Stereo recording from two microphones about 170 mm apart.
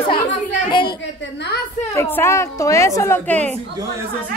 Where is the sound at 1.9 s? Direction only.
15° left (ahead or behind).